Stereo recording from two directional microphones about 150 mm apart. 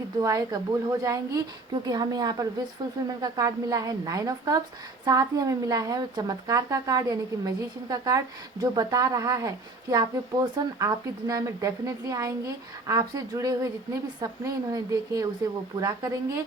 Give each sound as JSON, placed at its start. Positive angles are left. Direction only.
{"t": 0.2, "sound": "speech", "side_deg": -25}